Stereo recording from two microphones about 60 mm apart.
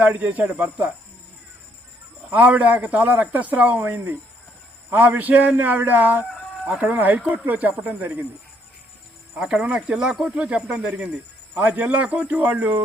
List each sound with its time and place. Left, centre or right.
0.0 s a man's voice: right
2.3 s a man's voice: right
9.3 s a man's voice: centre